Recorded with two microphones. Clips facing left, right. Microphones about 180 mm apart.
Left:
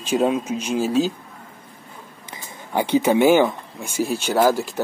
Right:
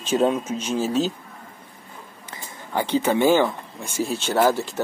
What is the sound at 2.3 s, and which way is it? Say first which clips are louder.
Speech: left 2 dB; 15° left (ahead or behind).